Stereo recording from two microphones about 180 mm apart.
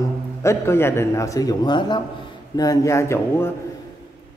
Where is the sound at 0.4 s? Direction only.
15° left (ahead or behind).